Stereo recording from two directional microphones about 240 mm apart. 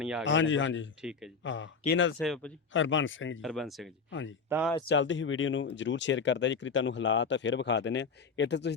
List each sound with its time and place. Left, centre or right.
0.0 s speech: centre
0.3 s speech: left
2.1 s speech: centre
2.7 s speech: left
3.4 s speech: centre
4.1 s speech: left
4.4 s speech: centre
4.9 s speech: left